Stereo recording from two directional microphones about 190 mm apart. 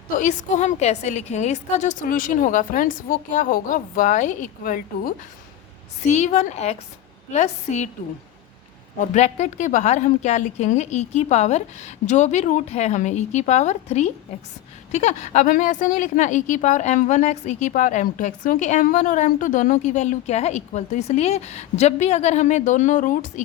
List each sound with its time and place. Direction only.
0.2 s a woman's voice: 40° left (ahead or behind)
9.0 s a woman's voice: 35° left (ahead or behind)